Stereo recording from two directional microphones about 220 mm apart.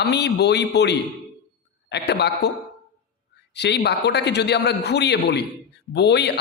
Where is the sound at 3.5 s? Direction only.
50° left (ahead or behind).